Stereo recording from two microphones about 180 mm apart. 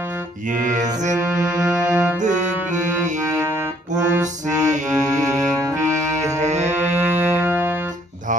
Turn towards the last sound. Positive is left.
turn(degrees=-10)  # may be behind; listen again after turning